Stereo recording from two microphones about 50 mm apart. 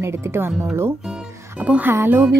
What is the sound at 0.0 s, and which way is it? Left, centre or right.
Speech, right.